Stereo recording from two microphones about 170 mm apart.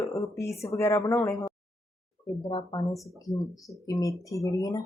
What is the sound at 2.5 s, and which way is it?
Speech, 25° left (ahead or behind).